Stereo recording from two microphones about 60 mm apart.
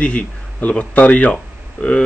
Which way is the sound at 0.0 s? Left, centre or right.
Left.